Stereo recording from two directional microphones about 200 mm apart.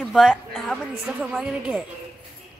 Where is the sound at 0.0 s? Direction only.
Centre (ahead or behind).